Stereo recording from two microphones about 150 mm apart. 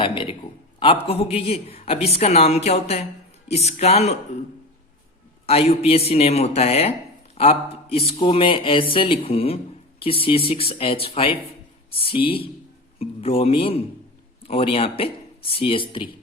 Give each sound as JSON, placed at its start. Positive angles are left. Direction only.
{"t": 0.0, "sound": "a woman's voice", "side_deg": 35}
{"t": 5.5, "sound": "a woman's voice", "side_deg": 40}